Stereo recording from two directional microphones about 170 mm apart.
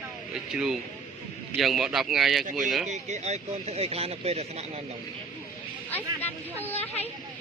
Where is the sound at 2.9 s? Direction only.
40° right (ahead or behind).